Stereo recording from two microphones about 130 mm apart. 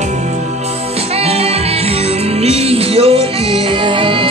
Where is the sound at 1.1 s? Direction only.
50° right (ahead or behind).